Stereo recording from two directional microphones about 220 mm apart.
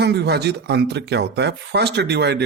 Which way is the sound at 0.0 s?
50° right (ahead or behind).